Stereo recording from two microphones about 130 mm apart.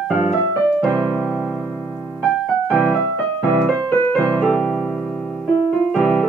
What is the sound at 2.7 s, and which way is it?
Music, 5° left (ahead or behind).